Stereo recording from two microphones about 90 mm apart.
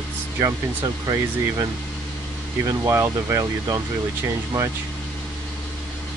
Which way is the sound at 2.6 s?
35° right (ahead or behind).